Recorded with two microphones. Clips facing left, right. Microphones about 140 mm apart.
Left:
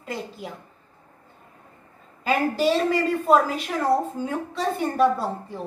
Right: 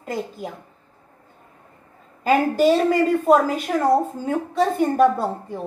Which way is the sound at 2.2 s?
50° right (ahead or behind).